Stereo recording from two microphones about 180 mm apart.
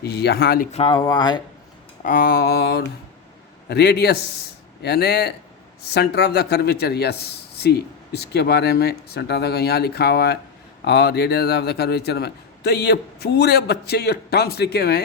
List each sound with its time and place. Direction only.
0.0 s speech: 65° left (ahead or behind)
0.7 s speech: 30° left (ahead or behind)
2.0 s speech: 55° left (ahead or behind)